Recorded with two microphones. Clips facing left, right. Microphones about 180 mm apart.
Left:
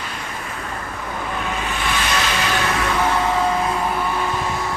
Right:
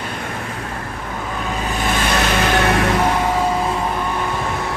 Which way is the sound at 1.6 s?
40° right (ahead or behind).